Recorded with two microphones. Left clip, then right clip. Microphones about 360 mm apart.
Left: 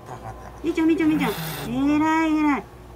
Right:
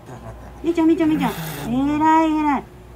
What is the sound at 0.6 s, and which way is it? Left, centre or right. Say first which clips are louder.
Speech: right 3 dB; centre.